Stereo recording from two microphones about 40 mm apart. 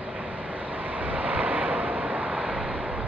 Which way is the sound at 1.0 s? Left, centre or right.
Right.